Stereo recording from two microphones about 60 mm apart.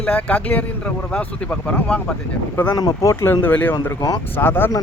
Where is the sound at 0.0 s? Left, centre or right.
Left.